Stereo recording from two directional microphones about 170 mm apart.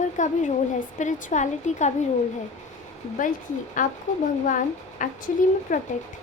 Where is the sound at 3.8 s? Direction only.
50° left (ahead or behind).